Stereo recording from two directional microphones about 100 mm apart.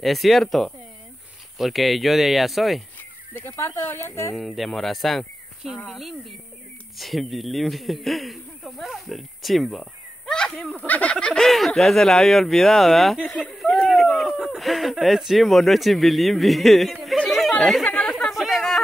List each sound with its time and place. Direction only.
0.0 s speech: centre (ahead or behind)
3.3 s speech: 25° left (ahead or behind)
4.4 s speech: centre (ahead or behind)
17.2 s chatter: centre (ahead or behind)
17.8 s a sound: 10° left (ahead or behind)